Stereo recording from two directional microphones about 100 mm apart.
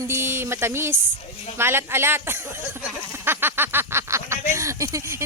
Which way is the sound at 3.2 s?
20° right (ahead or behind).